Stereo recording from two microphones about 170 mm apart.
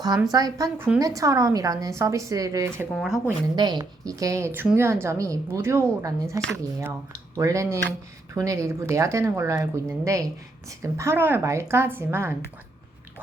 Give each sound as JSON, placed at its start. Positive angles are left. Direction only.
{"t": 0.3, "sound": "a woman's voice", "side_deg": -20}
{"t": 2.9, "sound": "speech", "side_deg": 0}
{"t": 3.5, "sound": "a woman's voice", "side_deg": -25}